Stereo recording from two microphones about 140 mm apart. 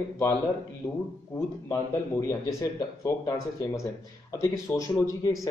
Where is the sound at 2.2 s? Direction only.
25° left (ahead or behind).